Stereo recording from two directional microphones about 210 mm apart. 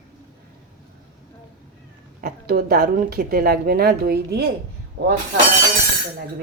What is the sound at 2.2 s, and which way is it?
A woman's voice, 50° right (ahead or behind).